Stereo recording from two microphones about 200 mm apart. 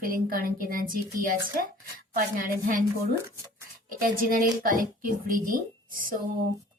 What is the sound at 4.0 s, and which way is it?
Speech, 45° right (ahead or behind).